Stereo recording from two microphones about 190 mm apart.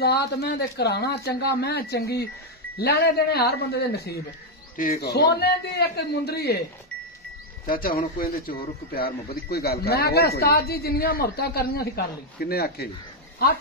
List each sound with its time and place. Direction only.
0.0 s a man's voice: 60° left (ahead or behind)
7.6 s a man's voice: 50° left (ahead or behind)